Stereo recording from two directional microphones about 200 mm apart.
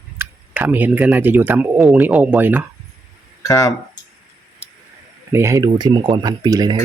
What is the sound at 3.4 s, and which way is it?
Speech, 15° left (ahead or behind).